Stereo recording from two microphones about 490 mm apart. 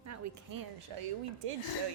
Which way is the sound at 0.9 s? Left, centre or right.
Right.